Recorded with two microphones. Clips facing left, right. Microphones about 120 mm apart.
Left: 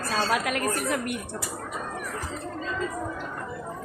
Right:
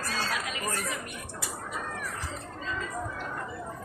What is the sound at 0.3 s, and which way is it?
Speech, 60° left (ahead or behind).